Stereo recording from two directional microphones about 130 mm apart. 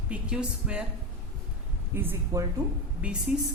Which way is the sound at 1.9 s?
15° right (ahead or behind).